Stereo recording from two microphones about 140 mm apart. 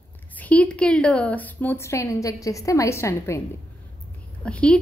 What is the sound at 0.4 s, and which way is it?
A woman's voice, 10° left (ahead or behind).